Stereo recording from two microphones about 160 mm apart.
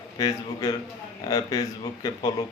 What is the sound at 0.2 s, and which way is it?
A man's voice, 25° left (ahead or behind).